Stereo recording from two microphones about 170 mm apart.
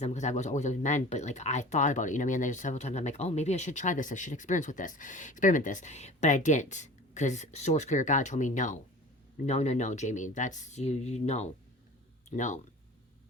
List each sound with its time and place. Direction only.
0.0 s speech: 45° left (ahead or behind)